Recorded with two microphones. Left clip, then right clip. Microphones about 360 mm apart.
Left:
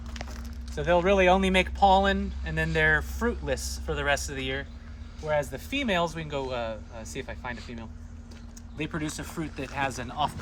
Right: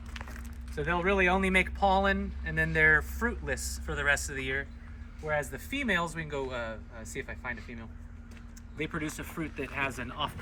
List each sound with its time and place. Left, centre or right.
0.8 s speech: left
8.8 s speech: left